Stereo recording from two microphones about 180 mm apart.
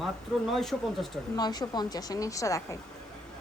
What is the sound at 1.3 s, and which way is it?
A woman's voice, 20° left (ahead or behind).